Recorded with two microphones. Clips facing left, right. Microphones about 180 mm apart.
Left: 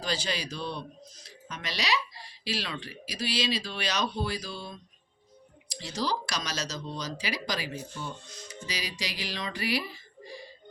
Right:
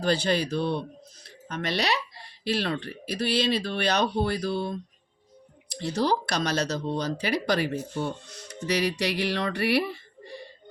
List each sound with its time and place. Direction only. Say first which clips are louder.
0.0 s speech: right 8 dB; 60° right (ahead or behind)